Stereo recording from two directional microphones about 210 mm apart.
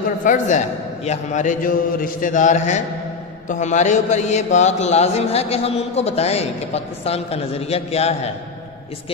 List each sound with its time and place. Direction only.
0.2 s a man's voice: 35° left (ahead or behind)